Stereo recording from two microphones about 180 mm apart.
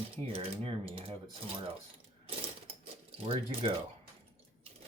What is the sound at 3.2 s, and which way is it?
Speech, 30° right (ahead or behind).